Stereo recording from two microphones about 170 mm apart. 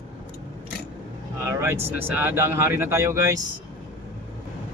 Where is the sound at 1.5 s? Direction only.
15° right (ahead or behind).